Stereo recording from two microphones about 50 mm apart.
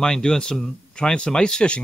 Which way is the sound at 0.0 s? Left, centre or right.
Centre.